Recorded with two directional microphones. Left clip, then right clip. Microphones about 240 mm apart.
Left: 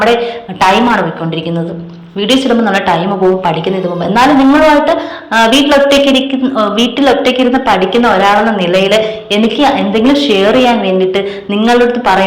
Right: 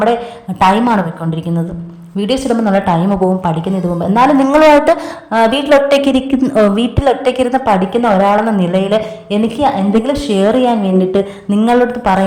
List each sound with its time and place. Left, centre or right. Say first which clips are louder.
0.0 s a woman's voice: left 4 dB; right
2.1 s a woman's voice: left 5 dB; right
5.3 s a woman's voice: left 2 dB; right